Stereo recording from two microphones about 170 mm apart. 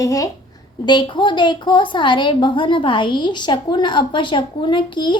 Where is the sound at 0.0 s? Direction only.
20° left (ahead or behind).